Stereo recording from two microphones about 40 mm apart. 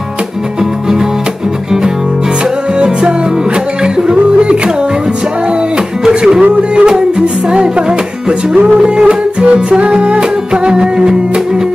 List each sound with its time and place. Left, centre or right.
2.8 s music: right
6.0 s music: centre